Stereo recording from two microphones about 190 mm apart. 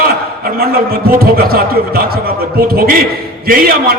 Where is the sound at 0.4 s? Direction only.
50° right (ahead or behind).